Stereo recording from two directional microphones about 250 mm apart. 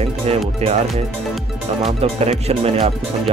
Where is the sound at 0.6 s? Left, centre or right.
Right.